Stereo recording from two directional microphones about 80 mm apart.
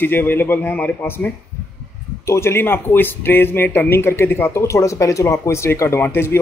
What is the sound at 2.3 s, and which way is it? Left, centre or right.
Speech, left.